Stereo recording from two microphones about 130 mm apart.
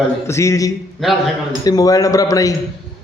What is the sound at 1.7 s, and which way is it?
Speech, 30° left (ahead or behind).